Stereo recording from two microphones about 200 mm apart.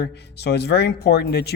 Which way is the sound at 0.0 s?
55° left (ahead or behind).